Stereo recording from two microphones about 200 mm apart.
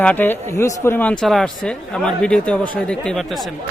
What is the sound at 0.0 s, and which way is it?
Speech, 10° left (ahead or behind).